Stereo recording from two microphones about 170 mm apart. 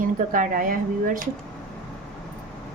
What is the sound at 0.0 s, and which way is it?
Speech, 55° right (ahead or behind).